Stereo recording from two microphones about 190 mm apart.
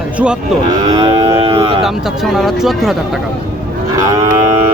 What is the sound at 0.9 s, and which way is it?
Cattle, 25° right (ahead or behind).